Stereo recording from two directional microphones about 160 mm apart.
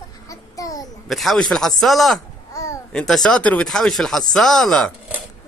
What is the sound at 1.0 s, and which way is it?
Speech, centre (ahead or behind).